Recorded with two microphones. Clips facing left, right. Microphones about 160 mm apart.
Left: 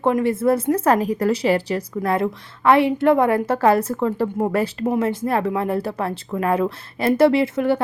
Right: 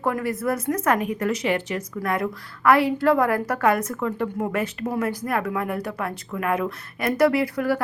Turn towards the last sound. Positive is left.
turn(degrees=25)  # may be behind; listen again after turning